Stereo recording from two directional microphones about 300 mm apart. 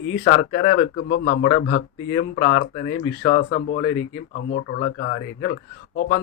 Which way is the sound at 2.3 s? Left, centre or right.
Centre.